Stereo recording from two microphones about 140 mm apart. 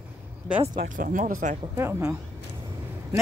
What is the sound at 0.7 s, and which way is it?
Speech, 75° right (ahead or behind).